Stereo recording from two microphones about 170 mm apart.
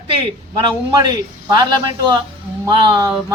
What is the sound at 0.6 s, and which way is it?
Speech, 25° right (ahead or behind).